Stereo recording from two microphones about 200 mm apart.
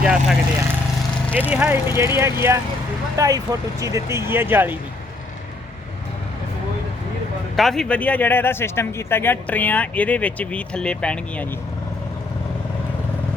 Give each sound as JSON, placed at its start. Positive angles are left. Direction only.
{"t": 0.0, "sound": "speech", "side_deg": -5}
{"t": 7.5, "sound": "a man's voice", "side_deg": 0}